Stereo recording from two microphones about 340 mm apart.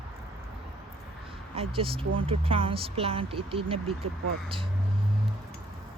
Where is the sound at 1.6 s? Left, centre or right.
Centre.